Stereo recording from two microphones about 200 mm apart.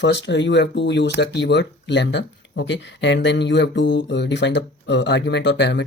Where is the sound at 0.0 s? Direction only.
60° left (ahead or behind).